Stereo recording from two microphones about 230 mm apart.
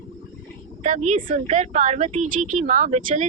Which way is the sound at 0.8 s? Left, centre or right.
Right.